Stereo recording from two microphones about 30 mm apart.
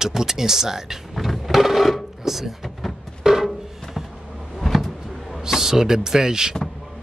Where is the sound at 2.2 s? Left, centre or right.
Centre.